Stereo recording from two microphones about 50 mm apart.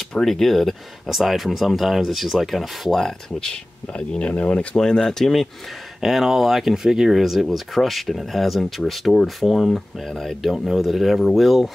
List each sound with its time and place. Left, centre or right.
0.1 s speech: centre
3.0 s speech: centre
4.3 s speech: left
4.7 s speech: centre
5.9 s speech: centre